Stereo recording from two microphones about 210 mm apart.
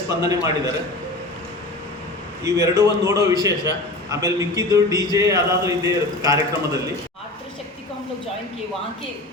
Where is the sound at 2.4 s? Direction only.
15° right (ahead or behind).